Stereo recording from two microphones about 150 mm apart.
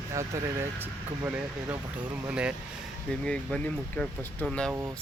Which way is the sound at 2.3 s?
5° right (ahead or behind).